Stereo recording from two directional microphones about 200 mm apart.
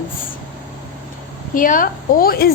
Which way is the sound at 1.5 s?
45° left (ahead or behind).